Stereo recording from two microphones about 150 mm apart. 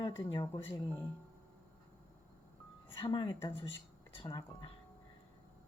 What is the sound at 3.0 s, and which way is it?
Speech, 30° left (ahead or behind).